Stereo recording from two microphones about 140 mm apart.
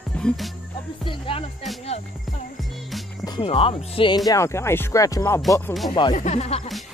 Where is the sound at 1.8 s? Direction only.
50° left (ahead or behind).